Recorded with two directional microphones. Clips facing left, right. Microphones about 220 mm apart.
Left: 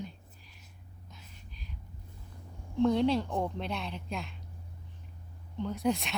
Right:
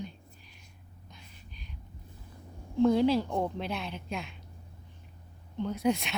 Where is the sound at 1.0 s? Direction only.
Centre (ahead or behind).